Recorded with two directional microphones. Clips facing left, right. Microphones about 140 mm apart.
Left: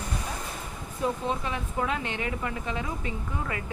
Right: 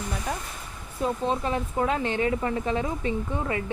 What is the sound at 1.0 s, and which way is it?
Speech, 35° right (ahead or behind).